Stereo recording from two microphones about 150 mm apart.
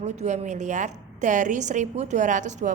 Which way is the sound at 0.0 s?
45° right (ahead or behind).